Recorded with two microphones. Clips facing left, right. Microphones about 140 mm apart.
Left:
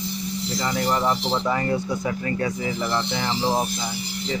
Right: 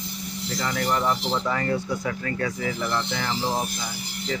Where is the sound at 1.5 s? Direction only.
15° left (ahead or behind).